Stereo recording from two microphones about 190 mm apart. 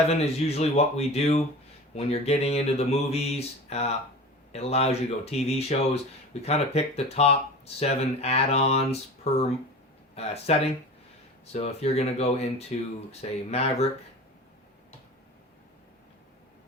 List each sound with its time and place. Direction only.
0.1 s mantra: 35° left (ahead or behind)